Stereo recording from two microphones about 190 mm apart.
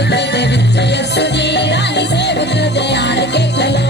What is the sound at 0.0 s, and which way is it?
Music, 65° left (ahead or behind).